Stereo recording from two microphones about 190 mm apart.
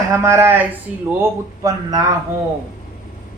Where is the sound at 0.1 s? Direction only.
15° right (ahead or behind).